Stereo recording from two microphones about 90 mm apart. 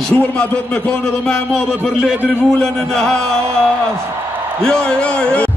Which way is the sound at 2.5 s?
10° left (ahead or behind).